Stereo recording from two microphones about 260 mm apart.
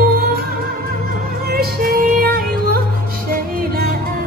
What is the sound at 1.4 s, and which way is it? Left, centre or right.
Music, right.